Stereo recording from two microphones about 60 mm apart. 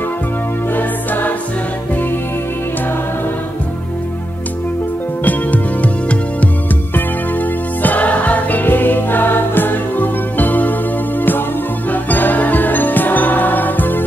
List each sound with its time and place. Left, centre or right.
0.7 s music: left
5.2 s music: left
7.8 s music: left